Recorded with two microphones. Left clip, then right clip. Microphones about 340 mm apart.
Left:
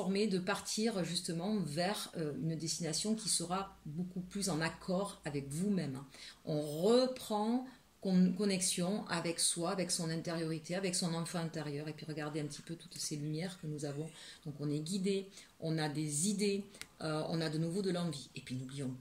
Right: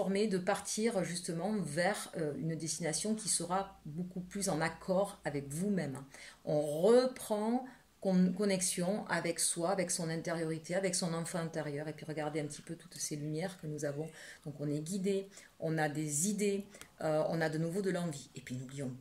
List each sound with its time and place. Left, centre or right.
0.1 s speech: centre